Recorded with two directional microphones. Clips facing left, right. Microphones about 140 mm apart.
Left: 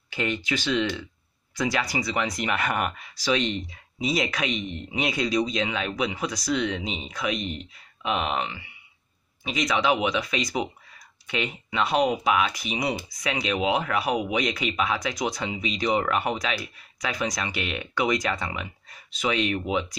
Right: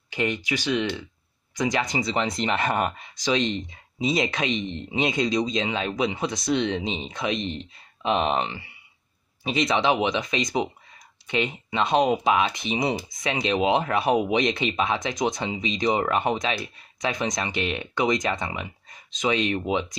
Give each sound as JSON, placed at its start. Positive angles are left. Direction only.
{"t": 0.1, "sound": "speech", "side_deg": -15}